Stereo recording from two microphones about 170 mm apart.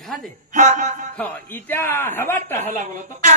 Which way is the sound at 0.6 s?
45° right (ahead or behind).